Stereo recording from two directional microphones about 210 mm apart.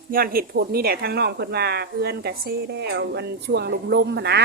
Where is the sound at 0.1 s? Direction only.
45° right (ahead or behind).